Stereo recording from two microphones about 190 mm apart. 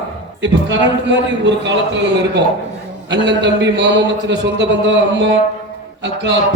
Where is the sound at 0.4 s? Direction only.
70° right (ahead or behind).